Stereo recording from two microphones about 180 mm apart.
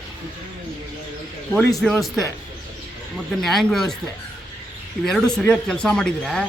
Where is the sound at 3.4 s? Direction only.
Centre (ahead or behind).